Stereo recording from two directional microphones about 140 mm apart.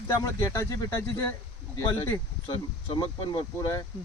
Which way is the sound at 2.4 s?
35° left (ahead or behind).